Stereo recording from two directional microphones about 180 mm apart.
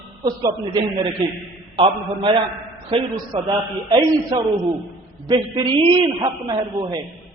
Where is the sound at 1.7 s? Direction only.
25° right (ahead or behind).